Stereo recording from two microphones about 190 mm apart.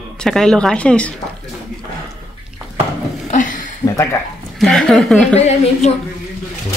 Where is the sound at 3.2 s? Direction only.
40° left (ahead or behind).